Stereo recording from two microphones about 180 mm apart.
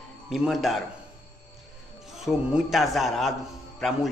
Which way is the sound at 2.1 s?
Centre (ahead or behind).